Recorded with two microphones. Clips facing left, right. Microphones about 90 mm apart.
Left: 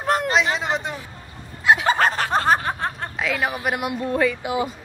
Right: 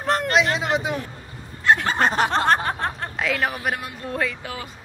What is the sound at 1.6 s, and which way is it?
Fowl, 10° left (ahead or behind).